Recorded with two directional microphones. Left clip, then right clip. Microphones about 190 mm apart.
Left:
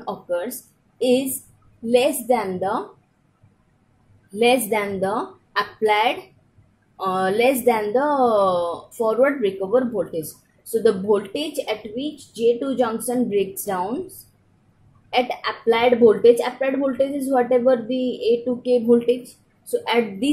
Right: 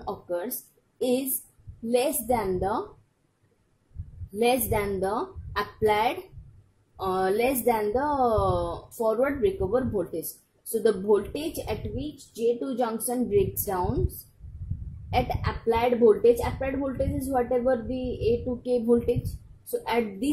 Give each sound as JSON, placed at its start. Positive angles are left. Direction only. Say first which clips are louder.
{"t": 0.0, "sound": "a sound", "louder": "left 6 dB", "side_deg": -25}
{"t": 1.0, "sound": "speech", "louder": "left 7 dB", "side_deg": -25}
{"t": 4.6, "sound": "speech", "louder": "left 5 dB", "side_deg": -25}
{"t": 15.0, "sound": "speech", "louder": "left 6 dB", "side_deg": -25}